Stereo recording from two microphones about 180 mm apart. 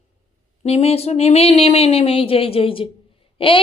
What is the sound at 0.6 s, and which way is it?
A woman's voice, 35° left (ahead or behind).